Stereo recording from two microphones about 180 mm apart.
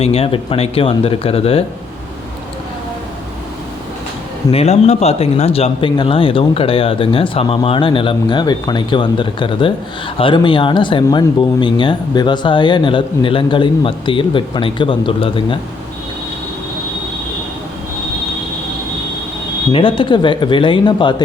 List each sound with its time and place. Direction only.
0.0 s speech: 35° left (ahead or behind)
4.5 s speech: 35° left (ahead or behind)
19.7 s speech: 30° left (ahead or behind)